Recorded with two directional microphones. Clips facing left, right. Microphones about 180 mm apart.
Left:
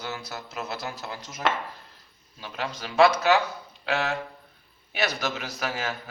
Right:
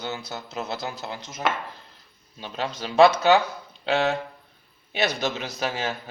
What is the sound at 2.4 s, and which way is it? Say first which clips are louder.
A man's voice: right 3 dB; 30° right (ahead or behind).